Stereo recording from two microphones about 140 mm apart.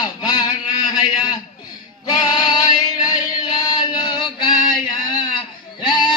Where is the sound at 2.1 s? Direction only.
30° left (ahead or behind).